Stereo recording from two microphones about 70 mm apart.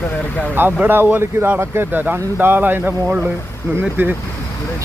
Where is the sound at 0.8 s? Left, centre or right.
Right.